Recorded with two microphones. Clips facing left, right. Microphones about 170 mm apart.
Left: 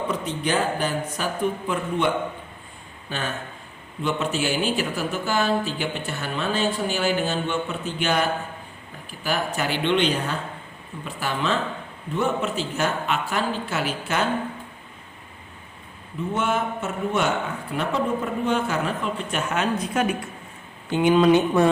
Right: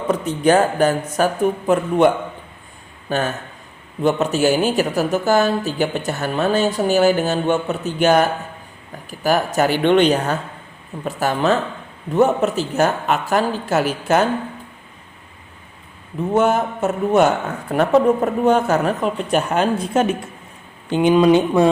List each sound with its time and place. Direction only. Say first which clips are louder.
0.1 s a man's voice: right 14 dB; 45° right (ahead or behind)
16.3 s a man's voice: right 8 dB; 40° right (ahead or behind); by 21.6 s 15° right (ahead or behind)